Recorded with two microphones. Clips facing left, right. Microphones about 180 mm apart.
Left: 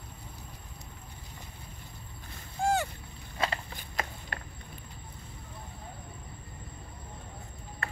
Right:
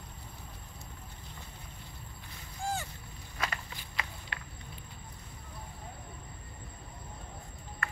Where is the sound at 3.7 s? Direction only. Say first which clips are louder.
Left 4 dB; 45° left (ahead or behind).